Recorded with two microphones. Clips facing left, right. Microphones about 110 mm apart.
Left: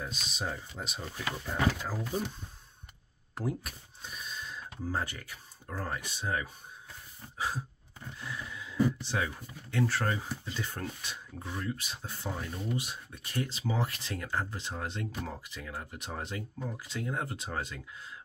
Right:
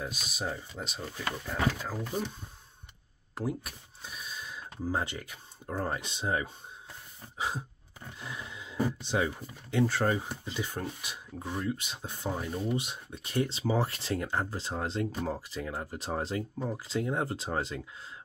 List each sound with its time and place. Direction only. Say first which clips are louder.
0.0 s speech: right 1 dB; 5° right (ahead or behind)
3.3 s cash register: right 1 dB; centre (ahead or behind)
4.9 s speech: right 2 dB; 20° right (ahead or behind)
7.3 s a sound: right 1 dB; 20° right (ahead or behind)
8.3 s speech: left 1 dB; 20° right (ahead or behind)